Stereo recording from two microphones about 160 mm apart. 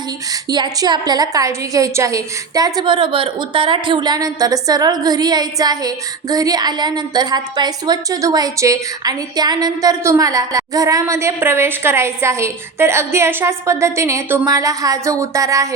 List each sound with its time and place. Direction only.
0.5 s a woman's voice: 25° right (ahead or behind)